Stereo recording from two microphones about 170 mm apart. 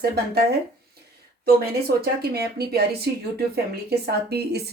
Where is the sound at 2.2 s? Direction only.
70° right (ahead or behind).